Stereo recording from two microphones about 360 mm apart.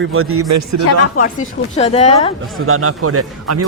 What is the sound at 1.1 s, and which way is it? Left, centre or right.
Speech, left.